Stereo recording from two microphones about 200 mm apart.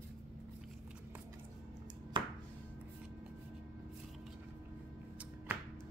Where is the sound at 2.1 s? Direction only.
20° right (ahead or behind).